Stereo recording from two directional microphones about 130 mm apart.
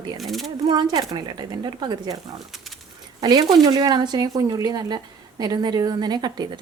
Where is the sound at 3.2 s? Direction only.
35° right (ahead or behind).